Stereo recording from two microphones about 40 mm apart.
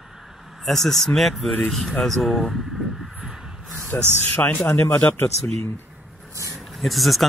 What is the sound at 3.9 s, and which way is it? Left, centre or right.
Speech, left.